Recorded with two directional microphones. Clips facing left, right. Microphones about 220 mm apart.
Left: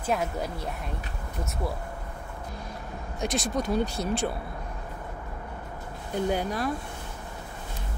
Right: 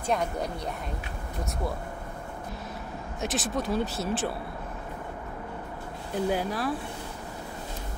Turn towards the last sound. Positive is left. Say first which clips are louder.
# even
turn(degrees=0)  # may be behind; listen again after turning